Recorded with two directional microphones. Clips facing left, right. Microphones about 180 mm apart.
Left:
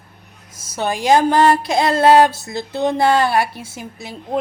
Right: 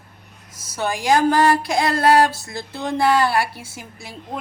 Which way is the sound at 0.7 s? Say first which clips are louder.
Left 3 dB; 20° left (ahead or behind).